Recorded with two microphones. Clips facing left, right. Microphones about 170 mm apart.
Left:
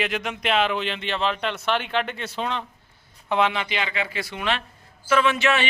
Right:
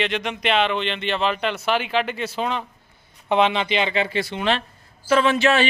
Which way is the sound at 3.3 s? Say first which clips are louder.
Right 4 dB; 20° right (ahead or behind).